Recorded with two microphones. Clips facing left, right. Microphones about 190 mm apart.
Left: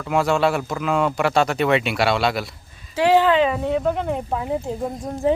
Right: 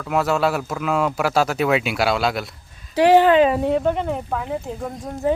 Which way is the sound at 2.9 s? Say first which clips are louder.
Right 3 dB; 45° right (ahead or behind).